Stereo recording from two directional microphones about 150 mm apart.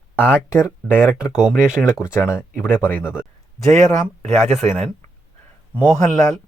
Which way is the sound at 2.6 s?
15° left (ahead or behind).